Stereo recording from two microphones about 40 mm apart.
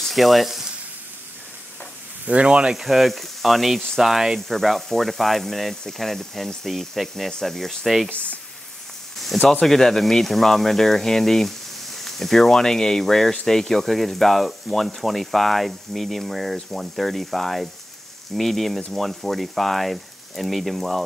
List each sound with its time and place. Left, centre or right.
0.1 s speech: centre
2.4 s speech: right
2.7 s speech: centre
4.5 s speech: centre
8.1 s speech: left
9.5 s speech: centre